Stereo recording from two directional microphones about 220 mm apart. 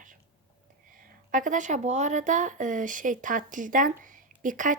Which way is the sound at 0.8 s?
40° right (ahead or behind).